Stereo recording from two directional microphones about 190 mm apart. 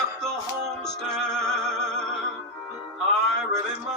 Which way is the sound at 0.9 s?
Centre (ahead or behind).